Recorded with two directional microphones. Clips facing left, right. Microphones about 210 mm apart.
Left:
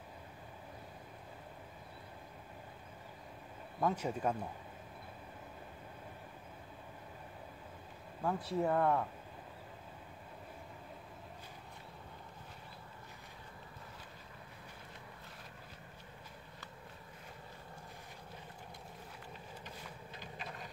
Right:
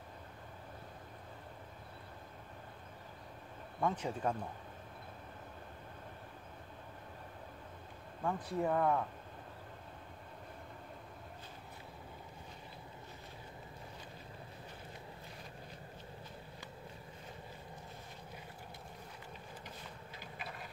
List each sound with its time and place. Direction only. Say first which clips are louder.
3.8 s speech: left 1 dB; 10° left (ahead or behind)
8.2 s speech: left 1 dB; 5° left (ahead or behind)
20.2 s boat: even; 10° right (ahead or behind)